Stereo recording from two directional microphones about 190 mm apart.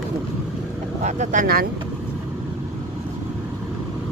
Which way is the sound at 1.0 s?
40° right (ahead or behind).